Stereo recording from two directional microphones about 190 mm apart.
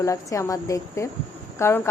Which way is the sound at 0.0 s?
15° left (ahead or behind).